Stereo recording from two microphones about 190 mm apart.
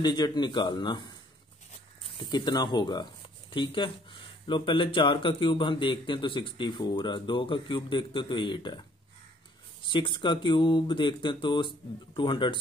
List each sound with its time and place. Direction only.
0.0 s speech: 20° left (ahead or behind)
2.1 s speech: 25° left (ahead or behind)
9.8 s speech: 25° left (ahead or behind)